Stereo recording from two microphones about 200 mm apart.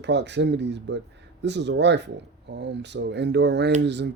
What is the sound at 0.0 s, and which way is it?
Speech, 60° right (ahead or behind).